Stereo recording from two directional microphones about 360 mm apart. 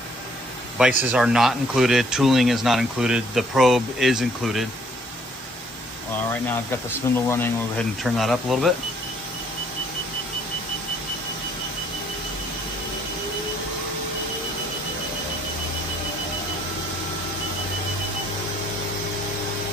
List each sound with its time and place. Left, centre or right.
0.8 s speech: centre
7.3 s speech: centre